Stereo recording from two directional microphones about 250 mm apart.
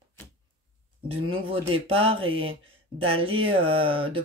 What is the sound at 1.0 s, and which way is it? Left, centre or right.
Speech, right.